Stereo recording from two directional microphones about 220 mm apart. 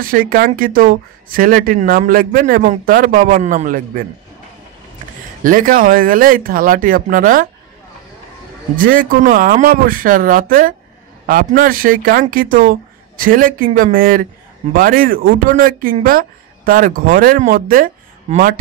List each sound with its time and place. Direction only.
0.0 s speech: 40° right (ahead or behind)
5.4 s speech: 40° right (ahead or behind)
8.7 s speech: 40° right (ahead or behind)